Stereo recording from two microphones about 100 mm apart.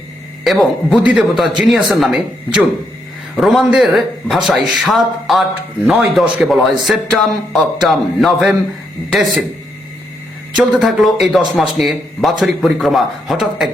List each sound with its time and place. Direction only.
0.4 s speech: centre (ahead or behind)
10.6 s speech: 5° right (ahead or behind)